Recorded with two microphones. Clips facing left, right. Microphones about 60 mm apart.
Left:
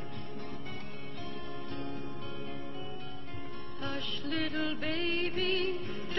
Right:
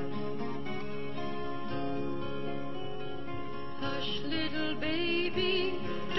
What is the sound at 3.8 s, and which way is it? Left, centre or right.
Music, centre.